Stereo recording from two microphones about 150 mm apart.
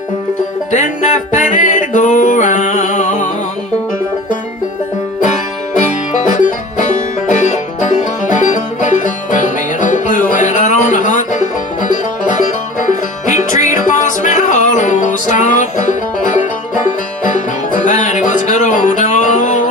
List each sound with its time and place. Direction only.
0.7 s music: 55° left (ahead or behind)
5.9 s music: 55° left (ahead or behind)